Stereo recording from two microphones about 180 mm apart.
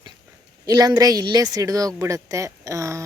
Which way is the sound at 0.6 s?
20° right (ahead or behind).